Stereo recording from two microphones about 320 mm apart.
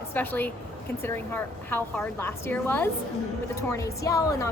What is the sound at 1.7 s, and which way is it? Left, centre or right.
A woman's voice, centre.